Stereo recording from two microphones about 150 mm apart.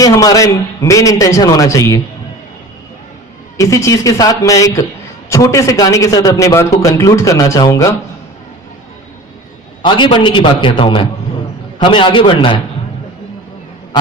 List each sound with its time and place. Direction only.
0.0 s a man's voice: 25° left (ahead or behind)
3.6 s a man's voice: 20° left (ahead or behind)
9.8 s a man's voice: 30° left (ahead or behind)